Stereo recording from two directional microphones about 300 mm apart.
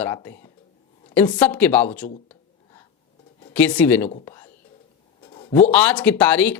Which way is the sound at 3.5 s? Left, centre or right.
Centre.